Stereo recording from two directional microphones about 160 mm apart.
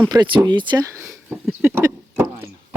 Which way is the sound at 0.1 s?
25° right (ahead or behind).